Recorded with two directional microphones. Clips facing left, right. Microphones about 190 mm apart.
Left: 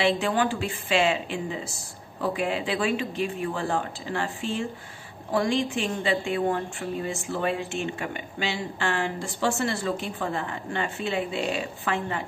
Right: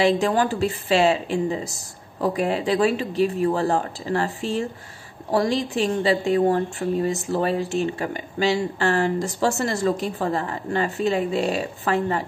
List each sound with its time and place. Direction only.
0.0 s a woman's voice: 40° right (ahead or behind)